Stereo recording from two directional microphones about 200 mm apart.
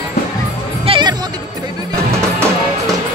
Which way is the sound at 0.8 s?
25° right (ahead or behind).